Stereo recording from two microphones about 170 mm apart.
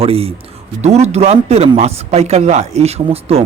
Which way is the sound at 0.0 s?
35° right (ahead or behind).